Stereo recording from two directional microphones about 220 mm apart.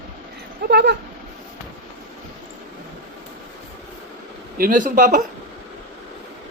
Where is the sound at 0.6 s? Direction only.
50° right (ahead or behind).